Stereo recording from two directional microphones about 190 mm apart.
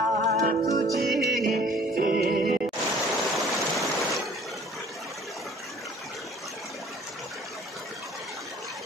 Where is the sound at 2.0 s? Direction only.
50° right (ahead or behind).